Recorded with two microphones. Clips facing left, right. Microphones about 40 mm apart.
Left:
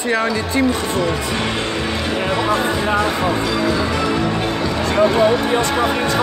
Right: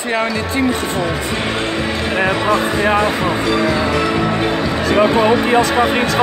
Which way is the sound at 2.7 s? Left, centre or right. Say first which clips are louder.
Right 3 dB; right.